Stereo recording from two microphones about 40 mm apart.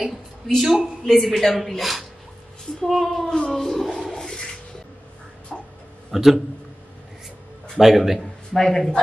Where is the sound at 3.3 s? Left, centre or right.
Centre.